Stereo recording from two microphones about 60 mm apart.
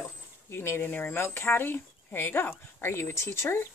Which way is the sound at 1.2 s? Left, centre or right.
Left.